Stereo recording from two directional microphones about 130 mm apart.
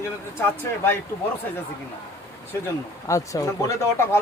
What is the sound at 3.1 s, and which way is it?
Speech, 25° left (ahead or behind).